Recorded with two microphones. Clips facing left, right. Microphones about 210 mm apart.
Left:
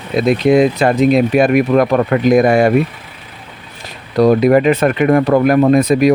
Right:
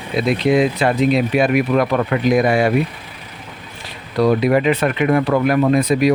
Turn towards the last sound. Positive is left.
turn(degrees=45)  # may be behind; listen again after turning